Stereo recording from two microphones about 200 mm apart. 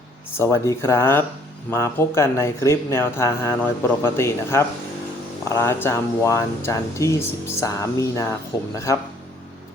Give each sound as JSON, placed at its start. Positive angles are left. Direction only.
{"t": 0.3, "sound": "speech", "side_deg": 15}